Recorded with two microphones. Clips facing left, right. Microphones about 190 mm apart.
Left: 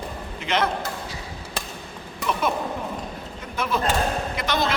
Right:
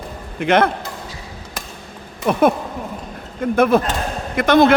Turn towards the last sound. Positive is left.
turn(degrees=-55)  # may be behind; listen again after turning